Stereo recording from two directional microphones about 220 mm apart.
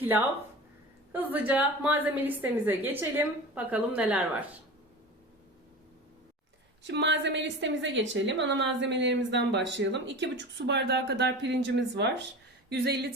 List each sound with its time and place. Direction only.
0.0 s a woman's voice: 10° right (ahead or behind)
6.8 s a woman's voice: 50° right (ahead or behind)